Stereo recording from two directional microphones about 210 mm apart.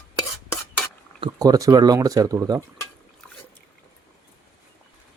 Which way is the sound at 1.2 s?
20° right (ahead or behind).